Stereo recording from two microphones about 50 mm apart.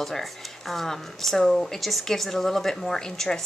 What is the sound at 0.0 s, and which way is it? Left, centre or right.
Speech, centre.